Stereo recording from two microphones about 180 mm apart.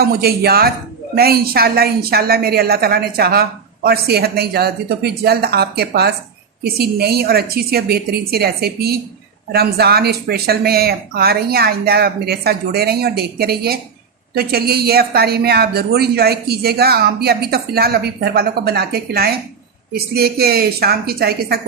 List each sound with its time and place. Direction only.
0.0 s a woman's voice: 60° right (ahead or behind)